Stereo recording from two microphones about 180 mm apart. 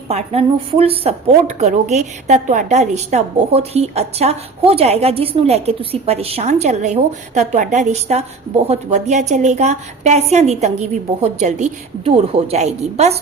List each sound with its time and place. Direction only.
0.1 s a woman's voice: 35° right (ahead or behind)